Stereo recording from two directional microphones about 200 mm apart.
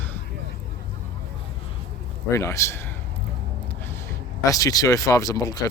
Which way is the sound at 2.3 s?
15° left (ahead or behind).